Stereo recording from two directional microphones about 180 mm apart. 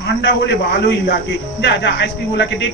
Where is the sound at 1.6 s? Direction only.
70° left (ahead or behind).